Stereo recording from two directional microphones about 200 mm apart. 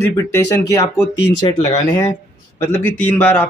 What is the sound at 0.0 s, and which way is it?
Speech, 15° left (ahead or behind).